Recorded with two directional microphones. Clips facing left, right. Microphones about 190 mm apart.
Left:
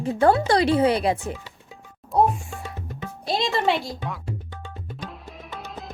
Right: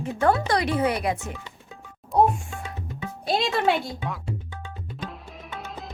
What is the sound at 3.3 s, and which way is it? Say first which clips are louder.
Speech: even; centre (ahead or behind).